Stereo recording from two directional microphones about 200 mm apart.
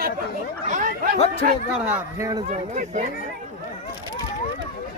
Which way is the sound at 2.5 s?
35° right (ahead or behind).